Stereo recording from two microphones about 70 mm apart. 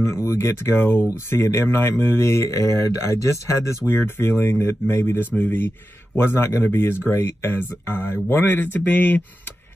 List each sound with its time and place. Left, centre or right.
0.0 s speech: left